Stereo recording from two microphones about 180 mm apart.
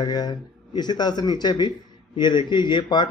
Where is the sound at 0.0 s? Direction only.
20° left (ahead or behind).